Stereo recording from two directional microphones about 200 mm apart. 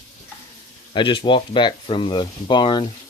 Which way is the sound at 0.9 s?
25° left (ahead or behind).